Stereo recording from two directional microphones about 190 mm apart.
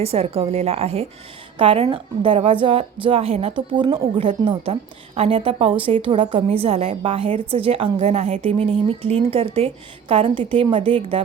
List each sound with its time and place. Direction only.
0.0 s a woman's voice: 30° right (ahead or behind)